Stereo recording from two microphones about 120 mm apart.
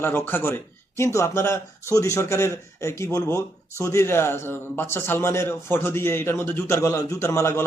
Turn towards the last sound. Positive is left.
turn(degrees=20)  # may be behind; listen again after turning